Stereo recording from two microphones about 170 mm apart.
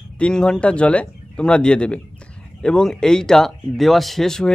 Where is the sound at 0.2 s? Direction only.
5° left (ahead or behind).